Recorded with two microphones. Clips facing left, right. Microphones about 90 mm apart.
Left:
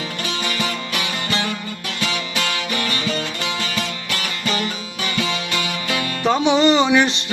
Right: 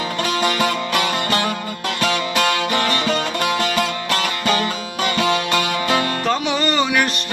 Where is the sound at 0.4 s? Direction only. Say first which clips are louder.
Right 6 dB; 50° right (ahead or behind).